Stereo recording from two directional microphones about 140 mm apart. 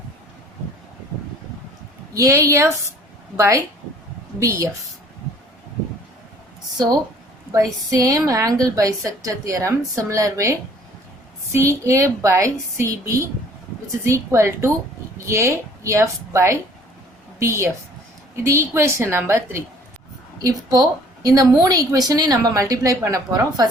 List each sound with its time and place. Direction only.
2.1 s a woman's voice: 25° right (ahead or behind)
7.5 s a woman's voice: 25° right (ahead or behind)